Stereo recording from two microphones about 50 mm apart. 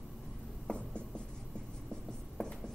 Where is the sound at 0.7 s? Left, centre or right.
Centre.